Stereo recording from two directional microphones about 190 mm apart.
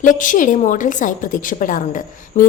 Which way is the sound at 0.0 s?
45° left (ahead or behind).